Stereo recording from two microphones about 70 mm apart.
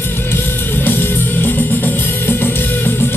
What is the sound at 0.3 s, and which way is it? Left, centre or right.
Music, left.